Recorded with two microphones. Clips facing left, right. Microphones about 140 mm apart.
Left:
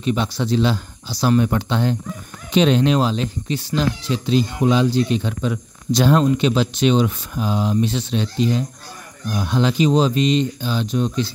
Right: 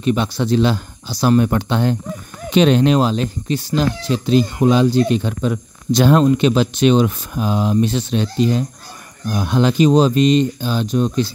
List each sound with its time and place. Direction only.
0.0 s speech: 60° right (ahead or behind)